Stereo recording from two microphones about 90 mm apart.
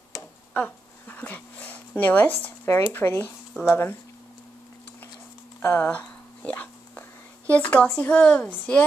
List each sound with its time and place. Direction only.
0.5 s speech: 20° left (ahead or behind)
5.6 s whispering: 25° left (ahead or behind)
8.0 s speech: 10° left (ahead or behind)